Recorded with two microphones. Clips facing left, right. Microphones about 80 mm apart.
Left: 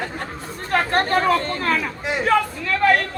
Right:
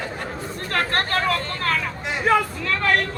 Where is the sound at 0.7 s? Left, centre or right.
Centre.